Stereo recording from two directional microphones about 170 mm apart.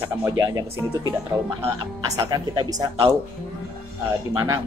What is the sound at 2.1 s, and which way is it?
Speech, 20° right (ahead or behind).